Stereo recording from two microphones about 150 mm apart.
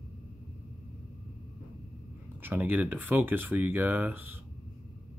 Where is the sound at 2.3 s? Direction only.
15° right (ahead or behind).